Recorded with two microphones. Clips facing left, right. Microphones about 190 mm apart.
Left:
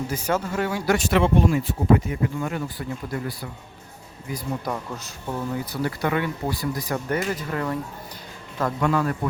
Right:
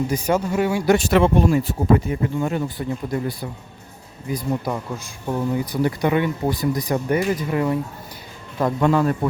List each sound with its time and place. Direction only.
0.1 s speech: 15° right (ahead or behind)
0.9 s a man's voice: 40° right (ahead or behind); by 4.4 s 20° right (ahead or behind)
4.6 s a man's voice: 10° right (ahead or behind); by 9.1 s 25° right (ahead or behind)